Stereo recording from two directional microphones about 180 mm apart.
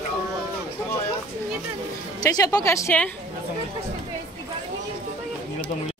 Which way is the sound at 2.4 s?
20° left (ahead or behind).